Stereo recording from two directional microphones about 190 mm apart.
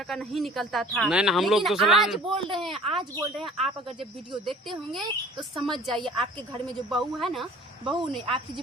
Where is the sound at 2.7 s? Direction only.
30° right (ahead or behind).